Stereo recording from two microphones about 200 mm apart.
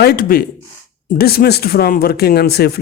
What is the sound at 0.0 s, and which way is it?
Speech, 50° left (ahead or behind).